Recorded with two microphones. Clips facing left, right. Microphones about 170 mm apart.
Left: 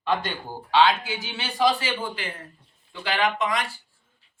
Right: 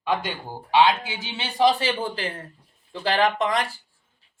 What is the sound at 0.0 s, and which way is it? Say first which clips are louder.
Speech: even; 10° right (ahead or behind).